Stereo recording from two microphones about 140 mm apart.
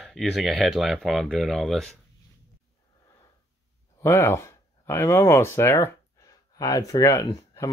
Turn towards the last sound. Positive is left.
turn(degrees=25)  # may be behind; listen again after turning